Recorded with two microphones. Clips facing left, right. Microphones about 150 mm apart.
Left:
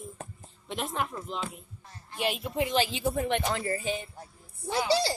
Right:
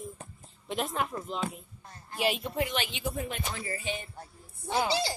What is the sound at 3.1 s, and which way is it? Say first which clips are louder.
Speech: left 7 dB; 70° left (ahead or behind).